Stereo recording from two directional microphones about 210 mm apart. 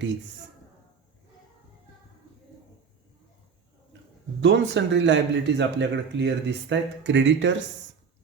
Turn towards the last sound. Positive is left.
turn(degrees=-60)  # may be behind; listen again after turning